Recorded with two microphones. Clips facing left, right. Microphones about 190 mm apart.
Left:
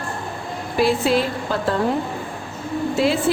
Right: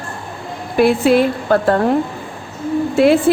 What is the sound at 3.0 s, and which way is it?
Speech, 60° right (ahead or behind).